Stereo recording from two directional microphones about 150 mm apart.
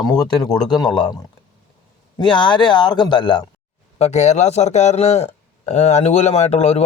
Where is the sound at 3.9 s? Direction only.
45° left (ahead or behind).